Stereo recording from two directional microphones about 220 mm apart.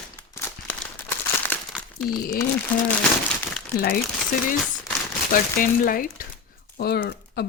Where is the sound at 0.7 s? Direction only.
10° left (ahead or behind).